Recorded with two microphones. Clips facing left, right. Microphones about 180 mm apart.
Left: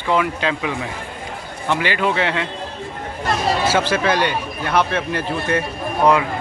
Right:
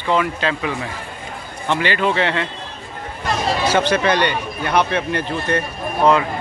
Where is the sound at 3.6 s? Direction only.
5° left (ahead or behind).